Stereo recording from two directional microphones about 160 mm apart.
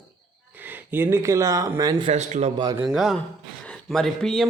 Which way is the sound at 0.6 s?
15° right (ahead or behind).